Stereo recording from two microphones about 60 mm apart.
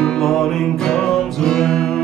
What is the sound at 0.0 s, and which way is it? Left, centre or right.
Music, centre.